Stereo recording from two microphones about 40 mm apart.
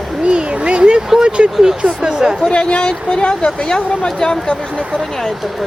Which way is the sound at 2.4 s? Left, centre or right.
Left.